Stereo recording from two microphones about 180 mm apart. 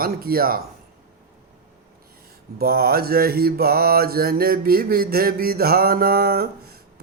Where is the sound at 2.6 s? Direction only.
60° right (ahead or behind).